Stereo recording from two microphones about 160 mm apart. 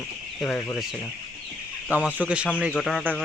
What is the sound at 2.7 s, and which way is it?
Speech, centre (ahead or behind).